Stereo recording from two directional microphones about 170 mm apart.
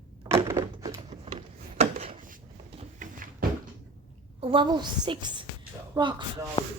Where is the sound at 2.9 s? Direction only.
50° right (ahead or behind).